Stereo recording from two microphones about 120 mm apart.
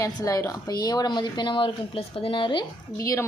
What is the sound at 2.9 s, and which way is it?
Speech, 25° left (ahead or behind).